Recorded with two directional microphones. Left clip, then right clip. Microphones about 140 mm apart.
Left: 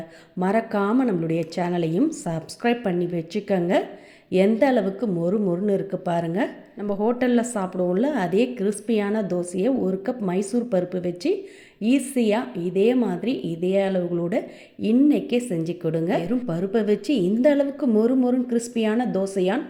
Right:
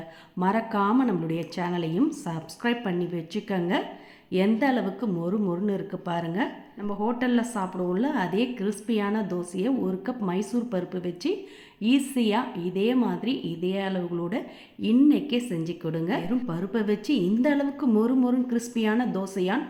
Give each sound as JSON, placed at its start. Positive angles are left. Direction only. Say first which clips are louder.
{"t": 0.3, "sound": "a woman's voice", "louder": "left 3 dB", "side_deg": 20}